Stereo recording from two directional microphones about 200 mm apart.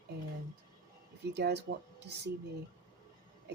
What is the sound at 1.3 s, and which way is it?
Speech, 55° right (ahead or behind).